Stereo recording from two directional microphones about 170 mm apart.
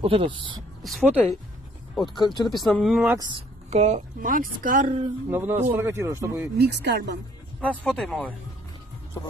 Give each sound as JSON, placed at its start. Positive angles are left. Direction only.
{"t": 0.0, "sound": "speech", "side_deg": -35}
{"t": 0.8, "sound": "speech", "side_deg": 0}
{"t": 2.1, "sound": "speech", "side_deg": 25}
{"t": 2.5, "sound": "speech", "side_deg": 0}
{"t": 3.1, "sound": "speech", "side_deg": -25}
{"t": 3.7, "sound": "a woman's voice", "side_deg": -40}
{"t": 5.3, "sound": "speech", "side_deg": -10}
{"t": 6.6, "sound": "speech", "side_deg": -75}
{"t": 7.6, "sound": "speech", "side_deg": 5}